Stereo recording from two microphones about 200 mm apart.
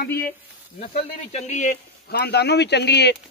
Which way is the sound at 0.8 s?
30° left (ahead or behind).